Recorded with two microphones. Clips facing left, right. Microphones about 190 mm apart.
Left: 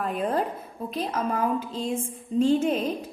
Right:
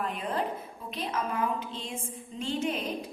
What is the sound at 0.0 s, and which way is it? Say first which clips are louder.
A woman's voice: left 5 dB; 45° left (ahead or behind).